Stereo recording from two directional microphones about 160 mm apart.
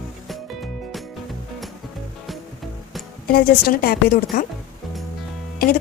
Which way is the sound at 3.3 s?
70° left (ahead or behind).